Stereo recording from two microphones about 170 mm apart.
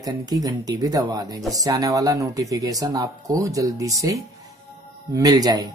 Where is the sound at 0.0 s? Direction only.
20° right (ahead or behind).